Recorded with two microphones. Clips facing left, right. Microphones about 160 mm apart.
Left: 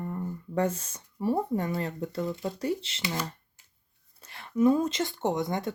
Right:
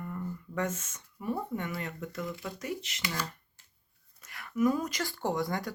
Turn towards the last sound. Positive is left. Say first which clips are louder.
# left 3 dB
turn(degrees=20)  # may be behind; listen again after turning